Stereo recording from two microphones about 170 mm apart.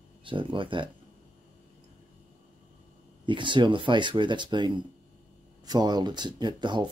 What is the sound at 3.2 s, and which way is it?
Speech, 30° right (ahead or behind).